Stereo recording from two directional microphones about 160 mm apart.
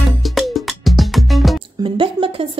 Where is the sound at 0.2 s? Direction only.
Centre (ahead or behind).